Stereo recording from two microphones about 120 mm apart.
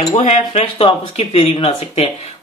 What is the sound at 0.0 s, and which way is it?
Speech, 70° left (ahead or behind).